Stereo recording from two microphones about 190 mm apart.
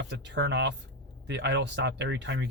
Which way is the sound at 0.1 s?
65° right (ahead or behind).